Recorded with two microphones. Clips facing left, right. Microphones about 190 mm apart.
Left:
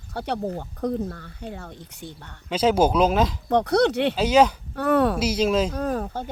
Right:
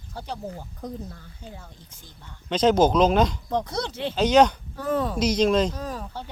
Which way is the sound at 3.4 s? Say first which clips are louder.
Left 8 dB; 70° left (ahead or behind).